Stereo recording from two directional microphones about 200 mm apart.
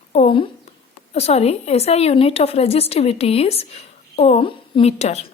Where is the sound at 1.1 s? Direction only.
30° left (ahead or behind).